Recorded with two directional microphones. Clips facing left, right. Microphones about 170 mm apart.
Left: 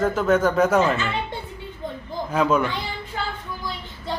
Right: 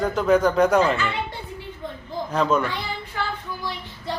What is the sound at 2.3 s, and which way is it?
Speech, 10° left (ahead or behind).